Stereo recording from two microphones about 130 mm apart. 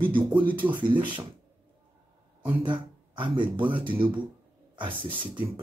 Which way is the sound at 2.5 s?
40° right (ahead or behind).